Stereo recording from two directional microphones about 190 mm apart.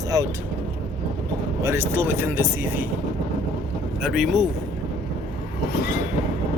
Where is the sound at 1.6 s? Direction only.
10° right (ahead or behind).